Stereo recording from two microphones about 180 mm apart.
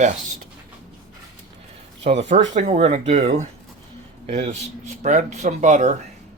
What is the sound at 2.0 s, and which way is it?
Speech, 40° right (ahead or behind).